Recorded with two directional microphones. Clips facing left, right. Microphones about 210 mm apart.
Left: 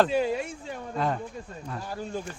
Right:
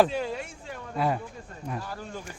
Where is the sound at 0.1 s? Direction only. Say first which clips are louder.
Left 5 dB; 15° left (ahead or behind).